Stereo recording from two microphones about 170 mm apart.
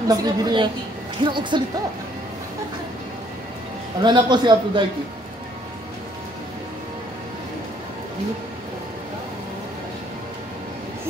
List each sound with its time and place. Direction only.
0.1 s a man's voice: 20° right (ahead or behind)
4.0 s a man's voice: 25° right (ahead or behind)